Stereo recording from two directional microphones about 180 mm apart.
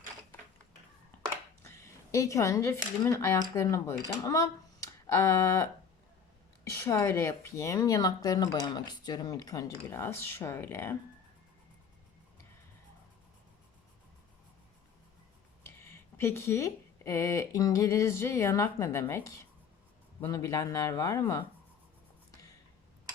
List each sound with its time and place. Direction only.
1.6 s speech: 15° left (ahead or behind)
15.6 s speech: 15° left (ahead or behind)